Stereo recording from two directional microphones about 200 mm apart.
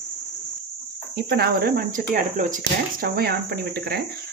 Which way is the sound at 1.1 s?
50° right (ahead or behind).